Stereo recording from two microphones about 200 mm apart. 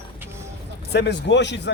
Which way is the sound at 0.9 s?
55° left (ahead or behind).